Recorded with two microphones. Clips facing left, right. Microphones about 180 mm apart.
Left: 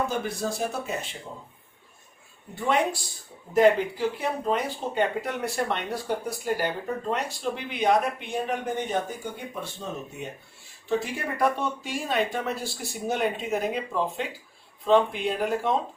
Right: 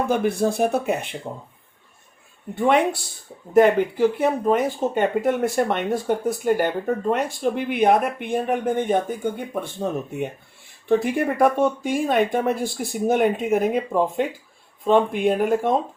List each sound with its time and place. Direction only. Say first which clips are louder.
0.1 s speech: right 9 dB; 60° right (ahead or behind)
2.6 s speech: right 6 dB; 60° right (ahead or behind)